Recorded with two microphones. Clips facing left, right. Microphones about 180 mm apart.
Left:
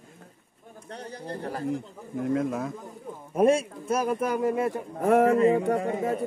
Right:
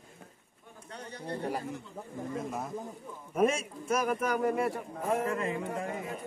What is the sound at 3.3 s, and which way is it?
Speech, 30° left (ahead or behind).